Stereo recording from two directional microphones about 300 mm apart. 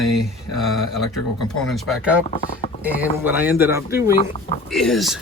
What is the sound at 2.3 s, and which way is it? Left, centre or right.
Speech, left.